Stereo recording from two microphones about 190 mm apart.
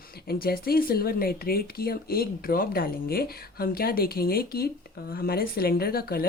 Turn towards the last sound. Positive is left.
turn(degrees=55)  # may be behind; listen again after turning